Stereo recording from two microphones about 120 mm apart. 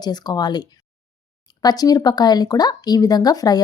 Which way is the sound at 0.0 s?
35° left (ahead or behind).